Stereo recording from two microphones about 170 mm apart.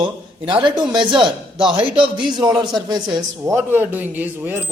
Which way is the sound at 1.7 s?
30° right (ahead or behind).